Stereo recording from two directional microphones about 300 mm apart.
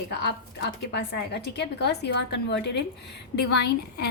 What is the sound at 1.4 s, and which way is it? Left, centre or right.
A woman's voice, left.